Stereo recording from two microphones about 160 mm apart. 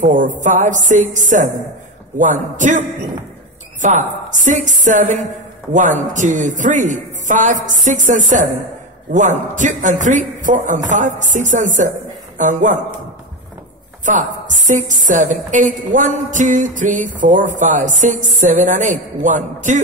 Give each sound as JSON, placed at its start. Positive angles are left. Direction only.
{"t": 0.0, "sound": "a woman's voice", "side_deg": -50}
{"t": 3.8, "sound": "a woman's voice", "side_deg": -50}
{"t": 14.0, "sound": "a woman's voice", "side_deg": -50}